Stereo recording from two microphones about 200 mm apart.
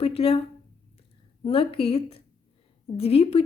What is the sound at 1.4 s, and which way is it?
A woman's voice, 30° left (ahead or behind).